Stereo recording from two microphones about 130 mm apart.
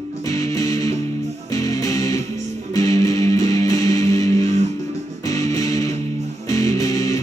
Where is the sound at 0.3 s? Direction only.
25° left (ahead or behind).